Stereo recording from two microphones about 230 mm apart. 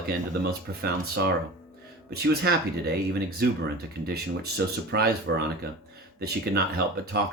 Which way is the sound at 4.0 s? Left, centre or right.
Right.